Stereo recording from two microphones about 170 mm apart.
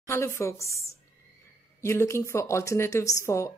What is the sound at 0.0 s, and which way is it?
A woman's voice, 15° left (ahead or behind).